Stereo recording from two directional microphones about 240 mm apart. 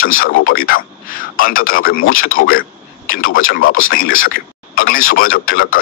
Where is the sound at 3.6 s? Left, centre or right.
Left.